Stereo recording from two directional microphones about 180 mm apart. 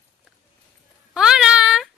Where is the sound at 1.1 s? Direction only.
5° right (ahead or behind).